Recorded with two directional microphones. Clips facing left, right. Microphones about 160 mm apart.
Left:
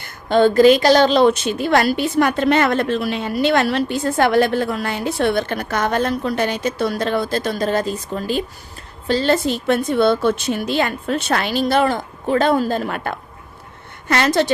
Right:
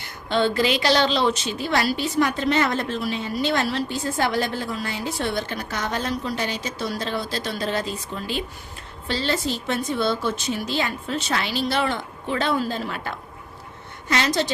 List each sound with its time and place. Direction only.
0.0 s a woman's voice: 45° left (ahead or behind)